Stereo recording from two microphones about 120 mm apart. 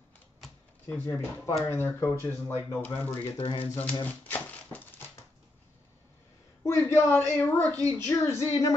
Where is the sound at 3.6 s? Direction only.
15° left (ahead or behind).